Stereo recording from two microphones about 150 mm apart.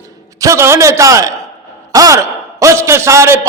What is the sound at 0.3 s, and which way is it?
A man's voice, 20° right (ahead or behind).